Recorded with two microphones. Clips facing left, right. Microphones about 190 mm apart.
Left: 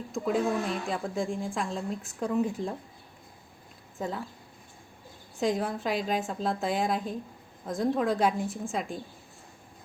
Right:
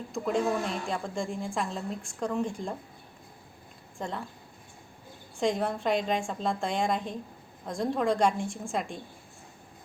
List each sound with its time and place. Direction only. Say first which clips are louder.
0.1 s a woman's voice: even; centre (ahead or behind)
3.9 s speech: left 2 dB; 5° left (ahead or behind)
5.4 s a woman's voice: even; centre (ahead or behind)